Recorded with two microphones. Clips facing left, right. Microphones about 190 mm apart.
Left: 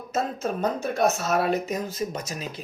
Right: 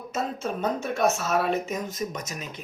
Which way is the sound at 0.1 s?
40° left (ahead or behind).